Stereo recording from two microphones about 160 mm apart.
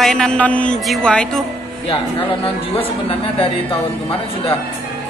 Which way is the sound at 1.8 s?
35° left (ahead or behind).